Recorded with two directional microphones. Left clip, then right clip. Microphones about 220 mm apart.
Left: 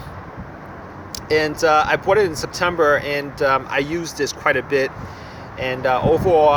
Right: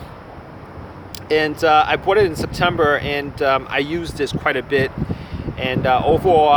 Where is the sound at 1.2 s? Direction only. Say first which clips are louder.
Right 1 dB; centre (ahead or behind).